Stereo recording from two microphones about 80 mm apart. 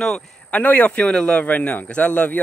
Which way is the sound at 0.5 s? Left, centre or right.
Centre.